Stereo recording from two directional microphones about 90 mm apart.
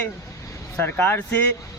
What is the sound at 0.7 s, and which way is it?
Speech, 20° left (ahead or behind).